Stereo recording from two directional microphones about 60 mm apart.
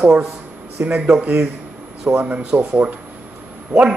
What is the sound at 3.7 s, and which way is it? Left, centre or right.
Speech, right.